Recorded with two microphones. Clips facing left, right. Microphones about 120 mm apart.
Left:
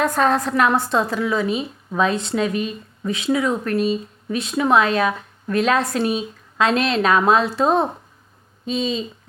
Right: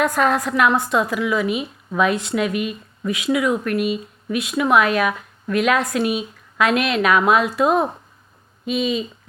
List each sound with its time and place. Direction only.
0.0 s a woman's voice: 30° left (ahead or behind)